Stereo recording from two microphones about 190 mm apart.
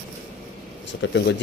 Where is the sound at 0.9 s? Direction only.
70° left (ahead or behind).